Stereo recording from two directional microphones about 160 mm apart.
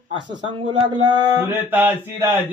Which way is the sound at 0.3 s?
30° right (ahead or behind).